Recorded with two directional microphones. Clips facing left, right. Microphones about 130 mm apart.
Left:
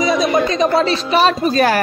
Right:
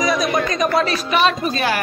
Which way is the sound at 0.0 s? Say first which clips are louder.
Left 4 dB; 25° left (ahead or behind).